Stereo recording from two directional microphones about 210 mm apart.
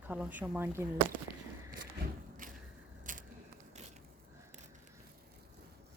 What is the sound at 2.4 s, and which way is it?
Vehicle, 40° right (ahead or behind).